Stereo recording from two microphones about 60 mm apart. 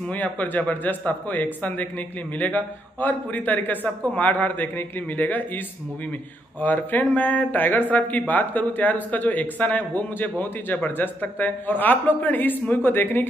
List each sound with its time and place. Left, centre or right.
0.1 s a man's voice: left
6.6 s a man's voice: left